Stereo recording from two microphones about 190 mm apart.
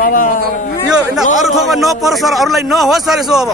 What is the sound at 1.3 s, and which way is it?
Speech, centre (ahead or behind).